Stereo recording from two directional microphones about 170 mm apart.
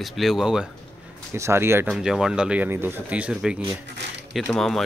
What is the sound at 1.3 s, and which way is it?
Speech, 15° right (ahead or behind).